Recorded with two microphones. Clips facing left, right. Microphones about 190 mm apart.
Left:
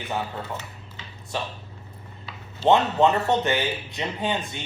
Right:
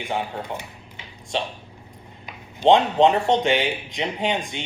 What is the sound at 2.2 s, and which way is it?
Speech, 15° right (ahead or behind).